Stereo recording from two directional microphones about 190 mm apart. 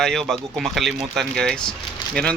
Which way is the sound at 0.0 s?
Centre (ahead or behind).